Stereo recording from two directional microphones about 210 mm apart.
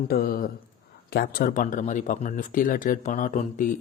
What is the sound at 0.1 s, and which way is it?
Speech, 45° left (ahead or behind).